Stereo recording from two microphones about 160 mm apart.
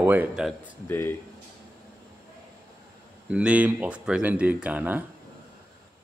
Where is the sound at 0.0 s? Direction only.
10° right (ahead or behind).